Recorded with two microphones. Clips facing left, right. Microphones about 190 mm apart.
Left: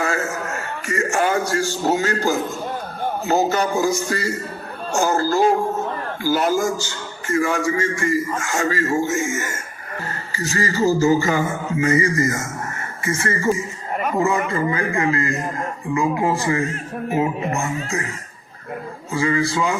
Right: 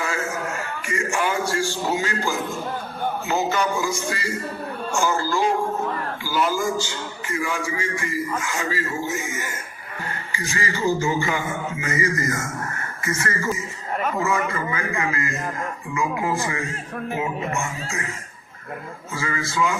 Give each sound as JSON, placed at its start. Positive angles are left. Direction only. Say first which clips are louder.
{"t": 0.0, "sound": "a sound", "louder": "left 3 dB", "side_deg": 45}
{"t": 3.2, "sound": "music", "louder": "left 5 dB", "side_deg": 40}
{"t": 6.2, "sound": "a man's voice", "louder": "left 5 dB", "side_deg": 45}
{"t": 10.3, "sound": "music", "louder": "left 6 dB", "side_deg": 40}
{"t": 19.1, "sound": "music", "louder": "left 7 dB", "side_deg": 30}